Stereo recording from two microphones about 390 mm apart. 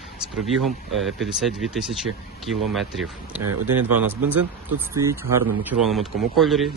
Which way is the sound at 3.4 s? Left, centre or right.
Right.